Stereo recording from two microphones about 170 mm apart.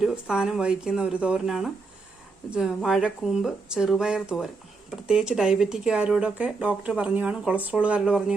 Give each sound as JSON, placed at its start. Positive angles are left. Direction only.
{"t": 0.0, "sound": "speech", "side_deg": -5}